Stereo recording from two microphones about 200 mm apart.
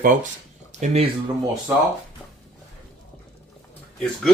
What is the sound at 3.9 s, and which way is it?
Speech, 5° left (ahead or behind).